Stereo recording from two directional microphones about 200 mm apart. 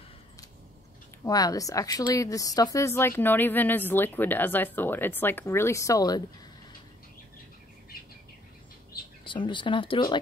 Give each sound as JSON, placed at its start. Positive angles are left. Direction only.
{"t": 1.2, "sound": "speech", "side_deg": 20}
{"t": 9.2, "sound": "speech", "side_deg": 25}